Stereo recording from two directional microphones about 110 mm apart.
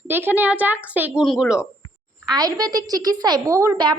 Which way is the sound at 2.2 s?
40° right (ahead or behind).